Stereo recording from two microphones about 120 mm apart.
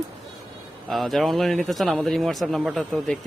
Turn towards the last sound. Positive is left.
turn(degrees=0)  # may be behind; listen again after turning